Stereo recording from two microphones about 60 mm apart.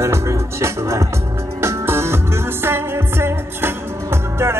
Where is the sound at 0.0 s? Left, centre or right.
Right.